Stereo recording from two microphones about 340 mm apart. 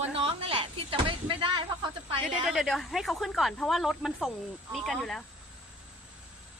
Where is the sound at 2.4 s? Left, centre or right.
Centre.